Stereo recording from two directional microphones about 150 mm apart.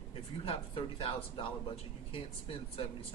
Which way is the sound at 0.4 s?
40° left (ahead or behind).